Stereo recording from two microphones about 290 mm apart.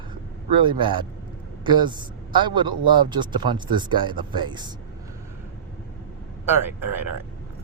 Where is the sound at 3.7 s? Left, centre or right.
Centre.